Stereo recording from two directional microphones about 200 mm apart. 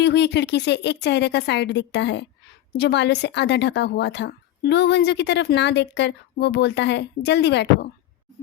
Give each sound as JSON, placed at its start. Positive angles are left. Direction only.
{"t": 0.0, "sound": "a woman's voice", "side_deg": 60}